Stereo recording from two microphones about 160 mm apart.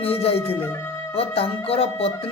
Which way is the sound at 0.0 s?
40° left (ahead or behind).